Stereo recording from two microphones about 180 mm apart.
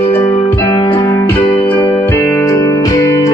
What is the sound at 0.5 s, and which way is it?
Music, 20° left (ahead or behind).